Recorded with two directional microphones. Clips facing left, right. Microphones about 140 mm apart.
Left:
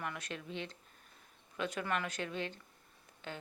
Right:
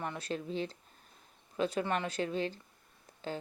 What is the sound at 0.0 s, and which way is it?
A woman's voice, 30° right (ahead or behind).